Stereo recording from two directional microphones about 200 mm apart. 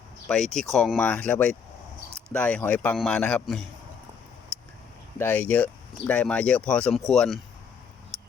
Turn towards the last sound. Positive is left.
turn(degrees=0)  # may be behind; listen again after turning